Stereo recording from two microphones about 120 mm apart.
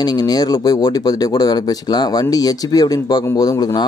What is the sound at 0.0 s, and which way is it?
Speech, 35° left (ahead or behind).